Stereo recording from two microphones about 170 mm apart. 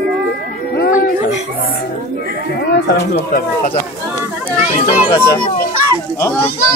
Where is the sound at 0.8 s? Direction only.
60° left (ahead or behind).